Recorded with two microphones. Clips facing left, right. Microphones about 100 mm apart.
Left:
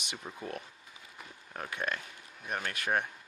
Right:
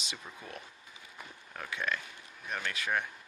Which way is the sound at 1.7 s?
50° left (ahead or behind).